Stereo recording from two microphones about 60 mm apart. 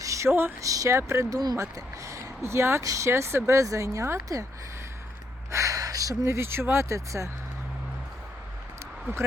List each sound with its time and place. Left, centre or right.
0.0 s a sound: right
0.3 s speech: right
0.6 s speech: right
1.4 s speech: right
2.8 s speech: right
5.5 s gasp: right
6.2 s speech: right